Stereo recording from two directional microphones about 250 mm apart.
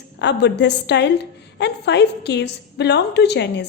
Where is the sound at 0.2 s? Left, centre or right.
Left.